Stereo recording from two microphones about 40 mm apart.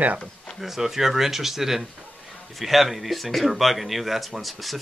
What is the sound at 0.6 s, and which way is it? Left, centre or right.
Speech, centre.